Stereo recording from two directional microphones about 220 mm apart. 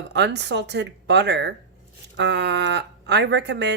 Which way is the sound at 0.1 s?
50° right (ahead or behind).